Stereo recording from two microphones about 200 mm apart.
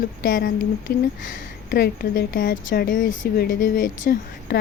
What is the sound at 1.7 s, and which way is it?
Speech, 45° left (ahead or behind).